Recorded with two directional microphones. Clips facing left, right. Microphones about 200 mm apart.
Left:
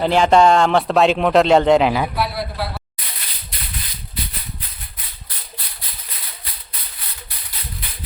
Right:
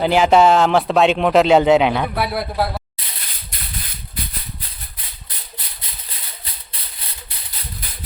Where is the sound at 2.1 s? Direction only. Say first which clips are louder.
Right 3 dB; 55° right (ahead or behind).